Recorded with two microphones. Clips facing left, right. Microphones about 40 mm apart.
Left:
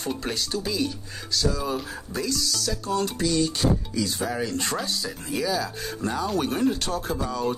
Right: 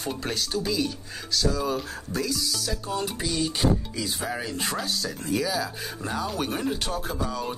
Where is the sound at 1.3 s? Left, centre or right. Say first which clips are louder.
Even; centre.